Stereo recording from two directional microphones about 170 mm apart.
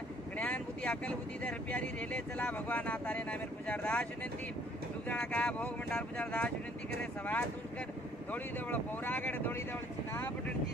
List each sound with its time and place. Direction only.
0.4 s speech: 10° left (ahead or behind)